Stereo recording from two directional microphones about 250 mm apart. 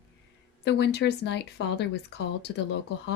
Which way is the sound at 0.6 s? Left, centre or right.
Left.